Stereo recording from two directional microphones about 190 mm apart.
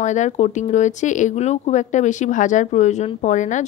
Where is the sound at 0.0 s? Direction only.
40° left (ahead or behind).